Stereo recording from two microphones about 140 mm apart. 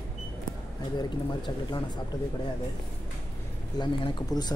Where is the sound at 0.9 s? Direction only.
35° left (ahead or behind).